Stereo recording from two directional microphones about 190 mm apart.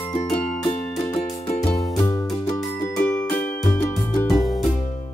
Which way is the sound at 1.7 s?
Centre (ahead or behind).